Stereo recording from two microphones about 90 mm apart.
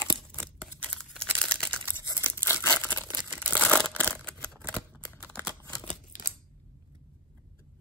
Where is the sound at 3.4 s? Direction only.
15° left (ahead or behind).